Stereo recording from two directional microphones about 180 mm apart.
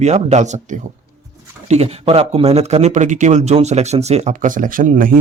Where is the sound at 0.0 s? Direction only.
40° right (ahead or behind).